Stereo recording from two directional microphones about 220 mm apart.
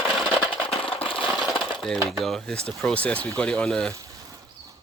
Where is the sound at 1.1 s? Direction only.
5° left (ahead or behind).